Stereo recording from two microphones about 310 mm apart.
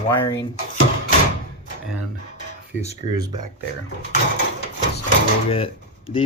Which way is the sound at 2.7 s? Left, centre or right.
Centre.